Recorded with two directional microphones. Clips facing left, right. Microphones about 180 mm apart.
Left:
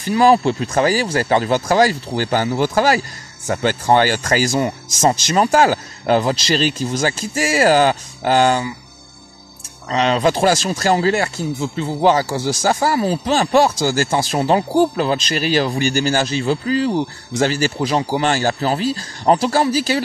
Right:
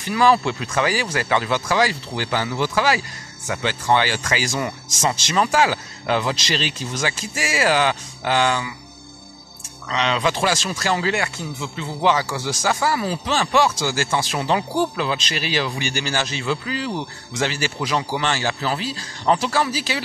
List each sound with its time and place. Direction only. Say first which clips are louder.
0.1 s speech: left 4 dB; 35° left (ahead or behind)
9.8 s speech: left 5 dB; 40° left (ahead or behind)